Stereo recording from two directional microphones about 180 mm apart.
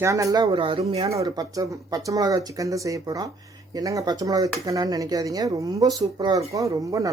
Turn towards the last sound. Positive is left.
turn(degrees=-20)  # may be behind; listen again after turning